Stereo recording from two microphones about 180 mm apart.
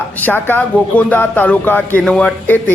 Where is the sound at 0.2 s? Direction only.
10° left (ahead or behind).